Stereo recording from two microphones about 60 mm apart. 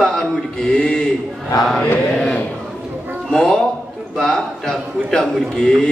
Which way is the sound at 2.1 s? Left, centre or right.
Centre.